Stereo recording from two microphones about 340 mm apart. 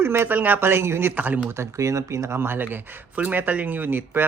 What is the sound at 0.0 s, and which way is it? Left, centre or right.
A man's voice, centre.